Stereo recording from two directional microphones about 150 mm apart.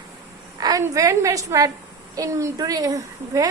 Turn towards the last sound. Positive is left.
turn(degrees=-20)  # may be behind; listen again after turning